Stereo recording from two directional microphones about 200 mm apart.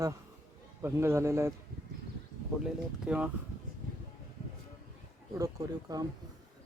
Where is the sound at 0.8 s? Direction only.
10° right (ahead or behind).